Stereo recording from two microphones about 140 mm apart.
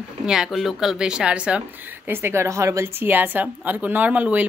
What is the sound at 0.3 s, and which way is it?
A woman's voice, 5° right (ahead or behind).